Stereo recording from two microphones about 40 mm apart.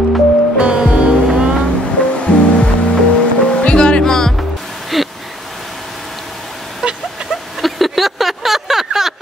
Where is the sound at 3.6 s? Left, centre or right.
Left.